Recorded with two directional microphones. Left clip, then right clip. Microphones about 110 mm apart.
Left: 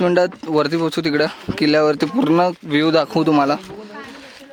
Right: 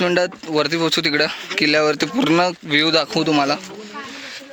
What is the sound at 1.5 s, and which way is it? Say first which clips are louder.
Speech: left 1 dB; 45° left (ahead or behind).